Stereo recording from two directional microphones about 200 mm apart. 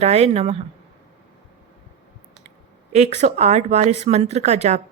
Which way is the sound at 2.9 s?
35° right (ahead or behind).